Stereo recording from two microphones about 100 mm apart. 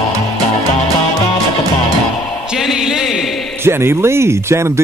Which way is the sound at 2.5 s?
5° right (ahead or behind).